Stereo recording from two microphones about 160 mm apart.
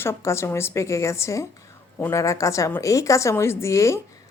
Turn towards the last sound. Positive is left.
turn(degrees=20)  # may be behind; listen again after turning